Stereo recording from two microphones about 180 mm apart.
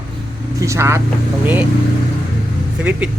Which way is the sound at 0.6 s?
15° right (ahead or behind).